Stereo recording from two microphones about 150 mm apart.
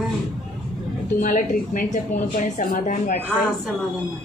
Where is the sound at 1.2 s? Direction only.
65° left (ahead or behind).